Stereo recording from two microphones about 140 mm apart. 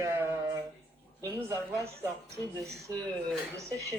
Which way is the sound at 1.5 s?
20° right (ahead or behind).